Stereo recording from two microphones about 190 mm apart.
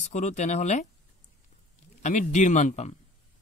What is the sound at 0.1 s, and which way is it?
Speech, 35° left (ahead or behind).